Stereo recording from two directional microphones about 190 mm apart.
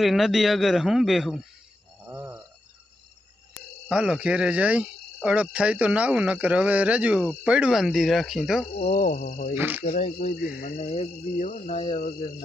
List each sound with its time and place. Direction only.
0.0 s cricket: centre (ahead or behind)
2.0 s a sound: 5° right (ahead or behind)
3.9 s cricket: 5° right (ahead or behind)
8.9 s speech: 50° left (ahead or behind)
9.2 s cricket: 35° left (ahead or behind)
9.6 s speech: 10° right (ahead or behind)
10.0 s cricket: 35° left (ahead or behind)
10.4 s speech: 50° left (ahead or behind)
10.8 s cricket: 35° left (ahead or behind)